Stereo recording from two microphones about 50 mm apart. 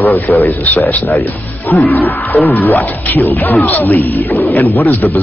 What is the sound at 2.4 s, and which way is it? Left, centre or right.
Speech, left.